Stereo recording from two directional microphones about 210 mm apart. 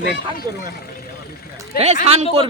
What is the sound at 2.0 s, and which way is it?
Speech, 30° right (ahead or behind).